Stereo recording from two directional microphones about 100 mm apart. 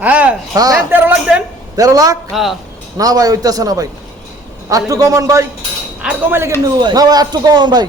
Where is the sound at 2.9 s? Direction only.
40° right (ahead or behind).